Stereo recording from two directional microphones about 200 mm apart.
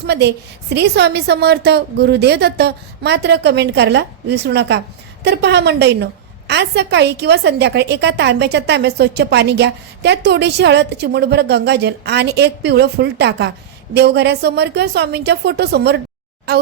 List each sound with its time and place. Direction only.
0.0 s a woman's voice: 55° right (ahead or behind)